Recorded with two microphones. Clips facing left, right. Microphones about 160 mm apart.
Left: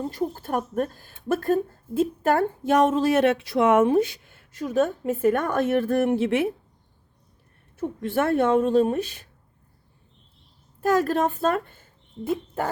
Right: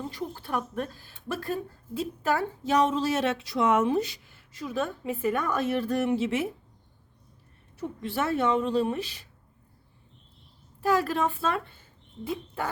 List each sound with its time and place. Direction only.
0.0 s speech: 45° left (ahead or behind)
7.8 s speech: 50° left (ahead or behind)
10.8 s speech: 45° left (ahead or behind)